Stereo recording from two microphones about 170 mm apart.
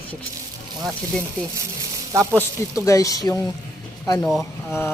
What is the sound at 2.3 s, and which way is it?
A man's voice, 15° left (ahead or behind).